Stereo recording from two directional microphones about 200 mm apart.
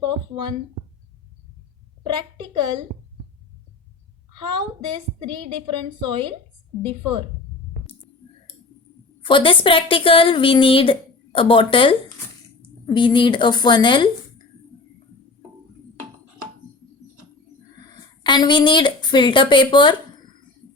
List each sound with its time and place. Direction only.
0.0 s a sound: 20° right (ahead or behind)
2.0 s a woman's voice: 20° right (ahead or behind)
4.4 s a woman's voice: 20° right (ahead or behind)
9.2 s a woman's voice: 25° left (ahead or behind)
18.2 s a woman's voice: 20° left (ahead or behind)